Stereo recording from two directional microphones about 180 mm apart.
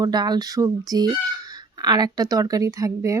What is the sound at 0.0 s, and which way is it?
Speech, 25° right (ahead or behind).